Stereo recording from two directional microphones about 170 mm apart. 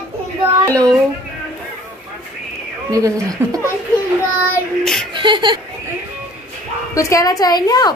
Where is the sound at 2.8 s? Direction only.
20° right (ahead or behind).